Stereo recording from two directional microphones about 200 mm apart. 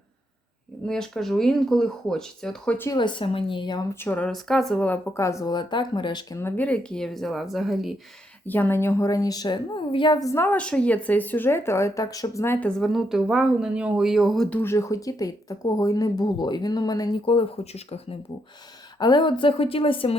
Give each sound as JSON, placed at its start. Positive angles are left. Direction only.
{"t": 0.9, "sound": "a woman's voice", "side_deg": 5}
{"t": 8.4, "sound": "a woman's voice", "side_deg": 10}